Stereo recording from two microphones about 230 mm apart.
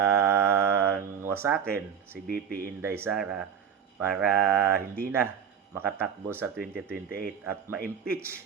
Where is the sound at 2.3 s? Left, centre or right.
Right.